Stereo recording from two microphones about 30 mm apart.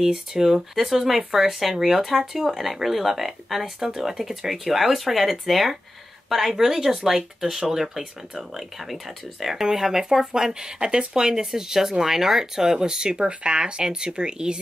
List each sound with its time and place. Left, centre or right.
0.0 s speech: centre
11.3 s speech: centre
13.3 s speech: right
13.8 s speech: right